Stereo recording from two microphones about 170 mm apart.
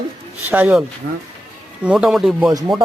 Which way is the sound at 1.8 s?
5° right (ahead or behind).